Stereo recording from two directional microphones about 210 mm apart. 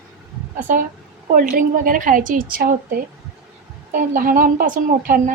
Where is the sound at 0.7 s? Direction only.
40° right (ahead or behind).